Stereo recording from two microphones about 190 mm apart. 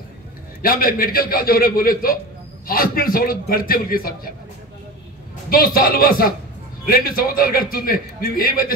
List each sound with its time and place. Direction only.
0.6 s a man's voice: 50° left (ahead or behind)
5.5 s a man's voice: 50° left (ahead or behind)